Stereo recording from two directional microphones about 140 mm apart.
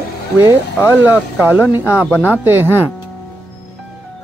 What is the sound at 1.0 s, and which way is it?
Speech, 10° right (ahead or behind).